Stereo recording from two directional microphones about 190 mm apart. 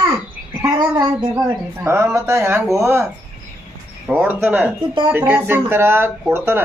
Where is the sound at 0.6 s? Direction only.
20° right (ahead or behind).